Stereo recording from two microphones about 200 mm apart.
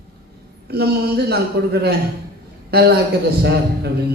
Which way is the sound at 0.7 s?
50° right (ahead or behind).